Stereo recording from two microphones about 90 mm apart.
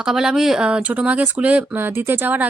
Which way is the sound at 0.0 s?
5° right (ahead or behind).